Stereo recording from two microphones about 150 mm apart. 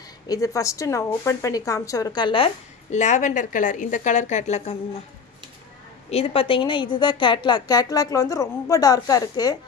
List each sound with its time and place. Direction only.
0.3 s a woman's voice: 20° left (ahead or behind)
2.9 s a woman's voice: 50° left (ahead or behind)
6.0 s a woman's voice: 40° left (ahead or behind); by 9.6 s 25° left (ahead or behind)